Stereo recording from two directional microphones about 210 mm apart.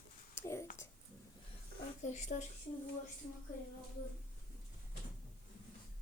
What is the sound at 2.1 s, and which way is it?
Speech, 35° left (ahead or behind).